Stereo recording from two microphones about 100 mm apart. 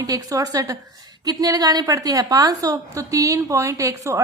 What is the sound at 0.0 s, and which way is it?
A woman's voice, 35° right (ahead or behind).